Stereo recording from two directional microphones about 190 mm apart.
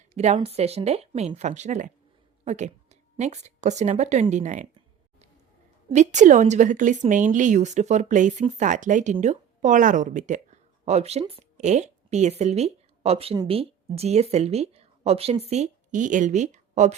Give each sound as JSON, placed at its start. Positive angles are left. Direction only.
{"t": 0.1, "sound": "a woman's voice", "side_deg": -35}
{"t": 5.9, "sound": "a woman's voice", "side_deg": -40}